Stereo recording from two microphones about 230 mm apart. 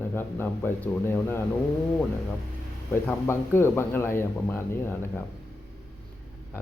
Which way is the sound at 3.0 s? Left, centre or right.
Centre.